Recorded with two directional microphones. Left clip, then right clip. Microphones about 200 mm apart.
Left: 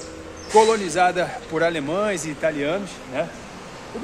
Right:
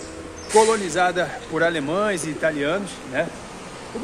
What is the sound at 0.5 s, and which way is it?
A man's voice, 15° left (ahead or behind).